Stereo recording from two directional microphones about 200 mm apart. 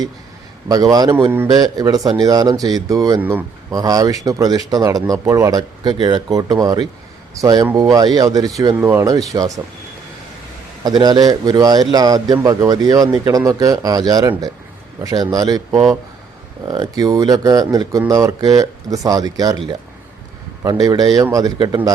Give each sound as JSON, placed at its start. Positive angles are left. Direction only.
{"t": 0.7, "sound": "a man's voice", "side_deg": -20}
{"t": 10.8, "sound": "a man's voice", "side_deg": -20}
{"t": 20.7, "sound": "a man's voice", "side_deg": -20}